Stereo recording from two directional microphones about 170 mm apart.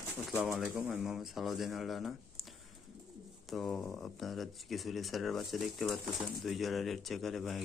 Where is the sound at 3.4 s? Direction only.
Centre (ahead or behind).